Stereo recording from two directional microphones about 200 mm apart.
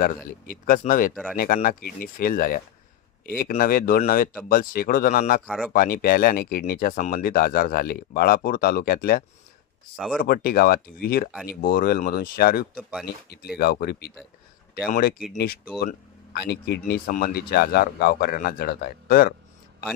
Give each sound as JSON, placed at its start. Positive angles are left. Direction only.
{"t": 0.0, "sound": "speech", "side_deg": 45}